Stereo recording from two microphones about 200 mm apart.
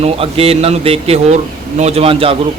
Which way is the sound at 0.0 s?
30° right (ahead or behind).